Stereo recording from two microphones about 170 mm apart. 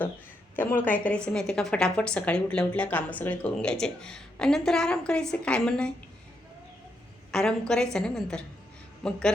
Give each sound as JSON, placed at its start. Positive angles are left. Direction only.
{"t": 0.5, "sound": "a woman's voice", "side_deg": 10}
{"t": 7.3, "sound": "a woman's voice", "side_deg": 5}